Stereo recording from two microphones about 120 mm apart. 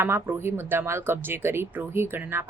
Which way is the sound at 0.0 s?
20° right (ahead or behind).